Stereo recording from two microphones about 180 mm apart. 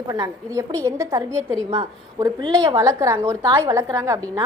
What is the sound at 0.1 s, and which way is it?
A woman's voice, 15° right (ahead or behind).